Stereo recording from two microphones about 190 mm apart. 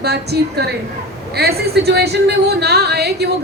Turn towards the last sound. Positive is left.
turn(degrees=-60)  # may be behind; listen again after turning